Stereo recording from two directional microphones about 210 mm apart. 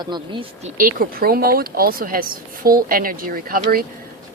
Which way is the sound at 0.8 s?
45° right (ahead or behind).